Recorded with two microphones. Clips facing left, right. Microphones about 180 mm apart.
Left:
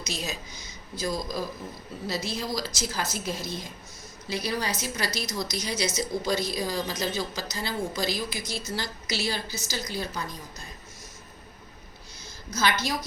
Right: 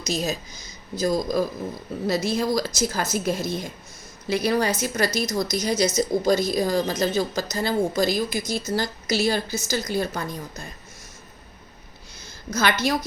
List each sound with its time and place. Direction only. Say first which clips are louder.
0.0 s a woman's voice: right 8 dB; 40° right (ahead or behind)
12.5 s a woman's voice: right 4 dB; 60° right (ahead or behind)